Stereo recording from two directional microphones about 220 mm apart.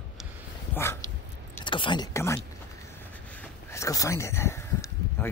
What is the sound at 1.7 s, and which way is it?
Speech, 20° left (ahead or behind).